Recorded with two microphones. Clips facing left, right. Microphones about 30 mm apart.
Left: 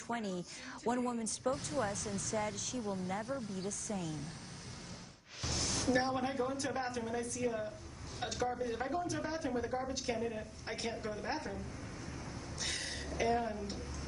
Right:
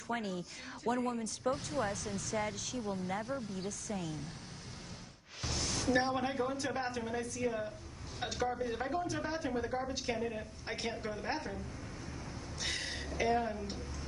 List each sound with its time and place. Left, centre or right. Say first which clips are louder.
0.1 s a woman's voice: right 1 dB; centre
5.4 s music: even; centre
5.9 s a woman's voice: right 2 dB; right
12.5 s a sound: right 2 dB; centre